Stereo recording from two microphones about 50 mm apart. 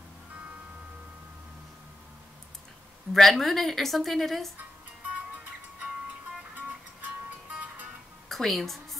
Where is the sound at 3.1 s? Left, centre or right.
Centre.